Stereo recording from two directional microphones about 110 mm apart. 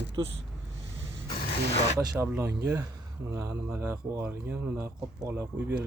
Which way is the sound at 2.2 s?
20° right (ahead or behind).